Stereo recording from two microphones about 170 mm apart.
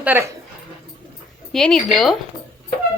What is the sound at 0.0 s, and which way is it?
Speech, 10° right (ahead or behind).